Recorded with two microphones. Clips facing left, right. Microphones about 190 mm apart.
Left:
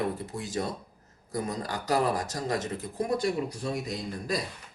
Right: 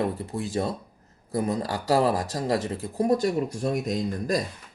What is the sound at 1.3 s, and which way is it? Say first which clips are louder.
Speech: right 6 dB; 30° right (ahead or behind).